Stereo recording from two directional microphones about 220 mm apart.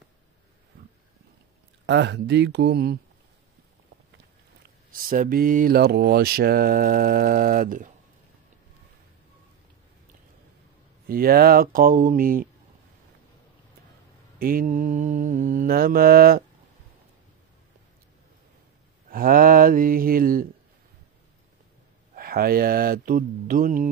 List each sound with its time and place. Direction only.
1.9 s speech: 55° right (ahead or behind)
4.9 s mantra: 40° right (ahead or behind)
11.1 s mantra: 45° right (ahead or behind)
14.4 s mantra: 40° right (ahead or behind)
19.0 s mantra: 40° right (ahead or behind)
22.1 s mantra: 40° right (ahead or behind)